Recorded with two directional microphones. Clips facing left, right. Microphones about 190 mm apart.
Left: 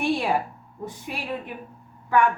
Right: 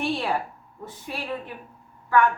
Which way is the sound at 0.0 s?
15° left (ahead or behind).